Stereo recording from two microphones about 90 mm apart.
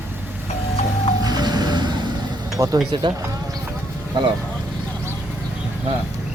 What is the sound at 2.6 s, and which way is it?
Speech, 35° right (ahead or behind).